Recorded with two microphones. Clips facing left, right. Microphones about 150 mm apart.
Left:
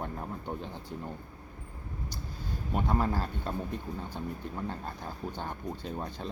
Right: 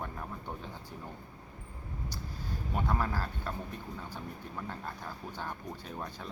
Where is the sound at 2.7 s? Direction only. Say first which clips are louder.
Left 4 dB; 20° left (ahead or behind).